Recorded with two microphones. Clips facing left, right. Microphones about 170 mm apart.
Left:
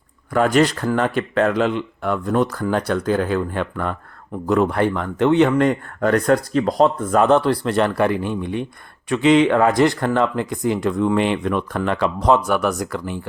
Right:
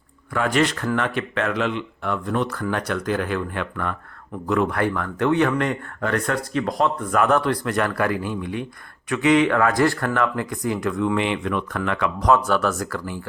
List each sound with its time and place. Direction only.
0.3 s speech: 40° left (ahead or behind)
12.5 s speech: 15° left (ahead or behind)